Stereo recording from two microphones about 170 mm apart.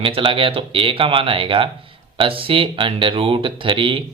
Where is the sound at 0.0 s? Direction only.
30° right (ahead or behind).